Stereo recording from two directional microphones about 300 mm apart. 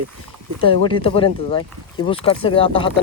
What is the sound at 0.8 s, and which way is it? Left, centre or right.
Speech, centre.